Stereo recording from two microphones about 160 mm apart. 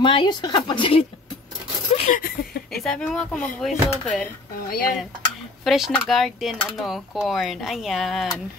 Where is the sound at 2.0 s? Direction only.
65° left (ahead or behind).